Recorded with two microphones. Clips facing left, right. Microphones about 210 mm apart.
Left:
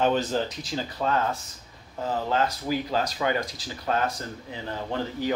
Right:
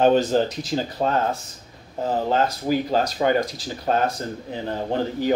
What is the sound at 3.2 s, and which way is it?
Speech, 45° right (ahead or behind).